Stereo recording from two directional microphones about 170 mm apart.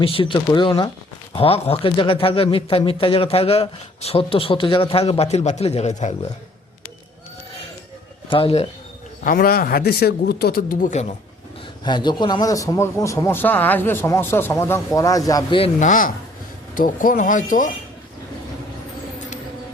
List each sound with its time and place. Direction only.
0.0 s speech: 30° left (ahead or behind)
8.3 s speech: 35° left (ahead or behind)
9.2 s speech: 60° left (ahead or behind)
11.9 s a man's voice: 25° left (ahead or behind)
15.8 s speech: 50° left (ahead or behind)